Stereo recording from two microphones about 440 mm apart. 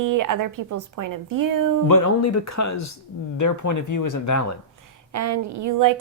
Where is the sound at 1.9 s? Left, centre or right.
Left.